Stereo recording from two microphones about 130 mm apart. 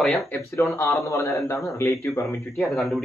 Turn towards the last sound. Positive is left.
turn(degrees=0)  # may be behind; listen again after turning